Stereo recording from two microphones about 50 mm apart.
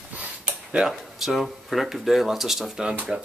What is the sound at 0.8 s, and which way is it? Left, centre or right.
Speech, centre.